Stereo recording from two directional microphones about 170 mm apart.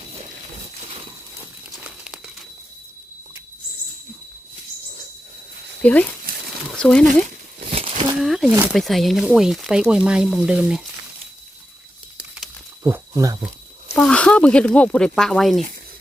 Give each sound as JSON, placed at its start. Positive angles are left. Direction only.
{"t": 5.8, "sound": "speech", "side_deg": 10}
{"t": 7.7, "sound": "a sound", "side_deg": -30}
{"t": 8.2, "sound": "speech", "side_deg": 0}
{"t": 12.8, "sound": "speech", "side_deg": -20}
{"t": 13.9, "sound": "speech", "side_deg": 5}